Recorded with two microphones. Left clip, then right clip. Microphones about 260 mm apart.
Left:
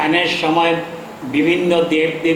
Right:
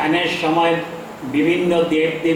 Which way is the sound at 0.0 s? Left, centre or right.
Centre.